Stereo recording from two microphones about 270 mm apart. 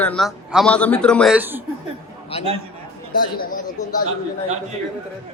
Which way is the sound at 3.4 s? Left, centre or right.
Left.